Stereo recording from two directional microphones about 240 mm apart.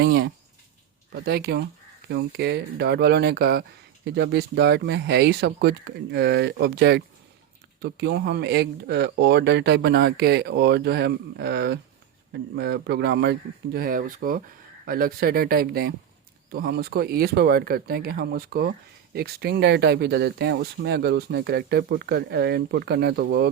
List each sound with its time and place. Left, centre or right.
0.0 s speech: right